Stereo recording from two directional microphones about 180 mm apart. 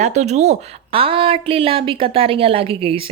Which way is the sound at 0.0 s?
40° right (ahead or behind).